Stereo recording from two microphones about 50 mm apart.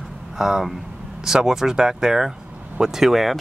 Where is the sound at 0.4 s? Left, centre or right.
Centre.